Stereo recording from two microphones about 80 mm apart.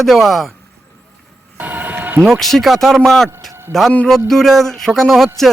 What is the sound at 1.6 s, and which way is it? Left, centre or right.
Music, right.